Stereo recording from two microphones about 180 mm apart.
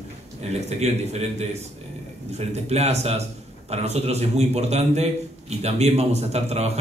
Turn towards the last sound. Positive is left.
turn(degrees=-35)  # may be behind; listen again after turning